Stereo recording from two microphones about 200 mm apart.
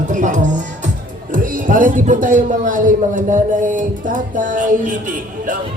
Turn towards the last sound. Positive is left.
turn(degrees=-40)  # may be behind; listen again after turning